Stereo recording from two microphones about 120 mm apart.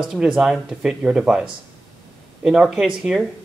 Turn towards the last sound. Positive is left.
turn(degrees=-5)  # may be behind; listen again after turning